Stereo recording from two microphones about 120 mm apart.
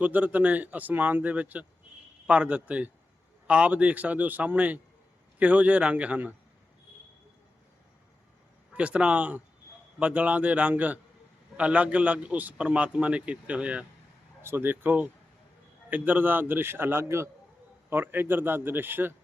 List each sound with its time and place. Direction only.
0.0 s a man's voice: 15° right (ahead or behind)
8.7 s a man's voice: 10° right (ahead or behind)